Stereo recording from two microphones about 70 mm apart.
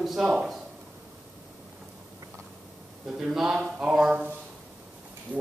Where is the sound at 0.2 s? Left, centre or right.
Centre.